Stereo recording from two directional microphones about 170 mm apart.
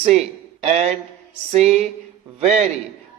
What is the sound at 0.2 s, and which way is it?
A man's voice, 40° right (ahead or behind).